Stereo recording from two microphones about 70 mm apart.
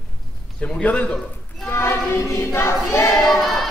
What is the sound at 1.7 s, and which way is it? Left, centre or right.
Choir, left.